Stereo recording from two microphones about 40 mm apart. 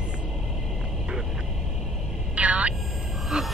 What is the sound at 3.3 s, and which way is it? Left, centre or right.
Speech, centre.